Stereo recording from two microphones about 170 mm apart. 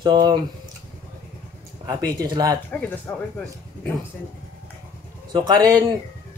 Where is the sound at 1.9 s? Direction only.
25° right (ahead or behind).